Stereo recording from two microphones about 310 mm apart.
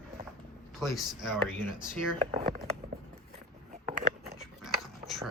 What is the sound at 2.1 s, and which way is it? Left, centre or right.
Speech, centre.